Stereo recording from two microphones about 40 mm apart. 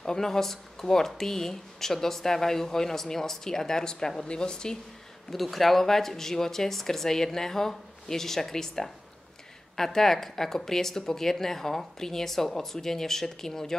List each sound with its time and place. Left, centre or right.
0.0 s a woman's voice: centre
5.3 s speech: centre